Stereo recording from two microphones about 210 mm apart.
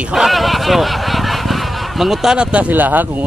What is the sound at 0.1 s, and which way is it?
Speech, centre (ahead or behind).